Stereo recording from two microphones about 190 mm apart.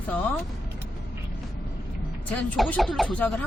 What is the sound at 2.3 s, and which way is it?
Speech, 5° left (ahead or behind).